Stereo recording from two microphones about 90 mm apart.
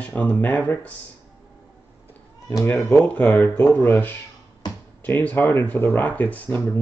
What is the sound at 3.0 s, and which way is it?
Speech, 25° left (ahead or behind).